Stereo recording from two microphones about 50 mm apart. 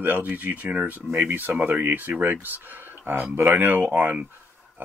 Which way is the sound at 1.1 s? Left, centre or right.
Right.